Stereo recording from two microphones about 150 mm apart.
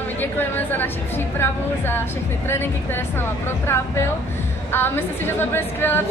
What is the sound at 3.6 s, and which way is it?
A woman's voice, 15° left (ahead or behind).